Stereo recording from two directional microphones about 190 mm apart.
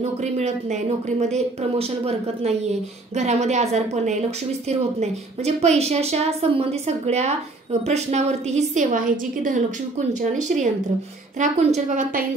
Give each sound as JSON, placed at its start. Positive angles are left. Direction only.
{"t": 0.0, "sound": "speech", "side_deg": -35}